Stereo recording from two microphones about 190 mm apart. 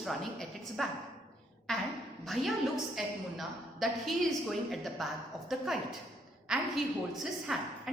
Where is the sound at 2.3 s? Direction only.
Centre (ahead or behind).